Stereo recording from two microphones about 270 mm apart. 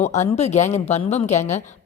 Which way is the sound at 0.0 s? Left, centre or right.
Left.